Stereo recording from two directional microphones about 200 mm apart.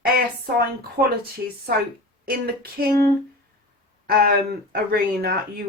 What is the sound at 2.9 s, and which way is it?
Speech, 50° right (ahead or behind).